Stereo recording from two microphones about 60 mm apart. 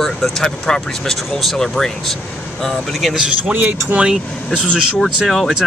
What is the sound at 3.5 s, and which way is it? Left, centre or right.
Speech, right.